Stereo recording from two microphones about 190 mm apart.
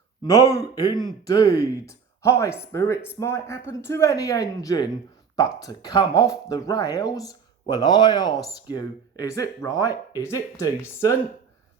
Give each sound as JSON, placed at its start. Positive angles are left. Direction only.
{"t": 0.2, "sound": "speech", "side_deg": 20}